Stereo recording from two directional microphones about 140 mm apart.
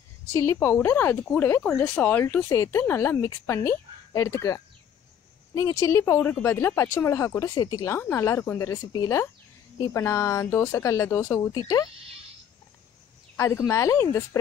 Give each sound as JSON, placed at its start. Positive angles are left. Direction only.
{"t": 0.3, "sound": "speech", "side_deg": 20}
{"t": 13.4, "sound": "speech", "side_deg": 20}